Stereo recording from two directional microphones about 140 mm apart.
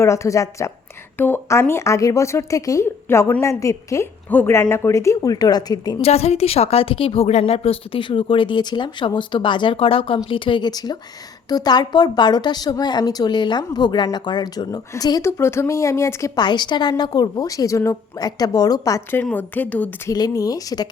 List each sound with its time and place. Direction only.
0.0 s speech: 20° left (ahead or behind)
6.0 s a woman's voice: 50° left (ahead or behind); by 19.2 s 25° left (ahead or behind)
19.2 s a woman's voice: 10° left (ahead or behind)
20.1 s speech: 25° left (ahead or behind)